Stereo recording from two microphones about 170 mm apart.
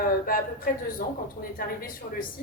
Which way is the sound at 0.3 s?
55° left (ahead or behind).